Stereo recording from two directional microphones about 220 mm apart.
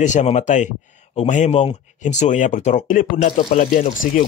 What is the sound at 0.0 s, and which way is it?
Speech, 30° left (ahead or behind).